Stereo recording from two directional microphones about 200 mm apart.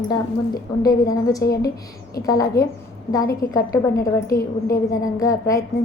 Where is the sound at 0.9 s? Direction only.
20° left (ahead or behind).